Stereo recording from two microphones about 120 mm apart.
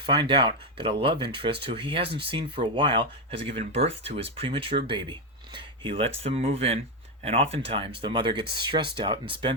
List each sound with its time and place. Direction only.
0.0 s speech: 40° right (ahead or behind)